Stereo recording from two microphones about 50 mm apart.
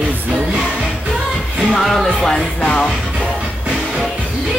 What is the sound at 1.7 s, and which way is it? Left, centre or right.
Music, centre.